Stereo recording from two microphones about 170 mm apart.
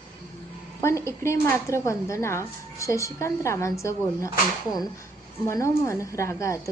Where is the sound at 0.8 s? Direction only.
15° left (ahead or behind).